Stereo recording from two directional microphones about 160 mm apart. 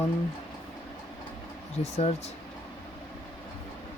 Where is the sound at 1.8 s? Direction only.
40° left (ahead or behind).